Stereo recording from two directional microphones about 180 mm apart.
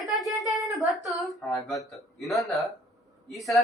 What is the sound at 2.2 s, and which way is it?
Speech, centre (ahead or behind).